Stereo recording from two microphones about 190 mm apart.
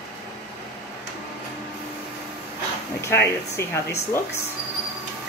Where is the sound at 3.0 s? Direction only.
15° left (ahead or behind).